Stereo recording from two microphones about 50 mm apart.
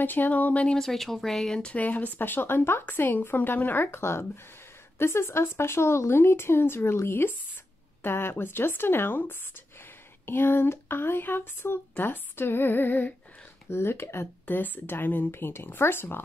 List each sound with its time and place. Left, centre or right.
0.0 s a woman's voice: left
0.7 s speech: centre
1.6 s a woman's voice: left
13.7 s speech: left
14.4 s speech: left